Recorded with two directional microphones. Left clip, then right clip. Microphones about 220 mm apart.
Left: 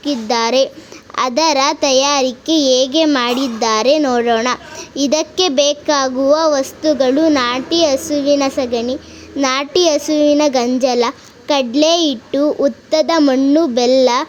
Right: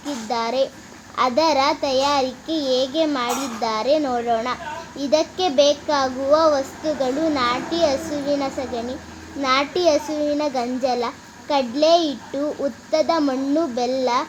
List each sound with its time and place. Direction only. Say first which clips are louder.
0.0 s a child's voice: left 8 dB; 50° left (ahead or behind)